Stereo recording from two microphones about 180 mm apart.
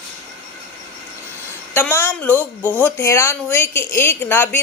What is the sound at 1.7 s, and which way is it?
Speech, 10° left (ahead or behind).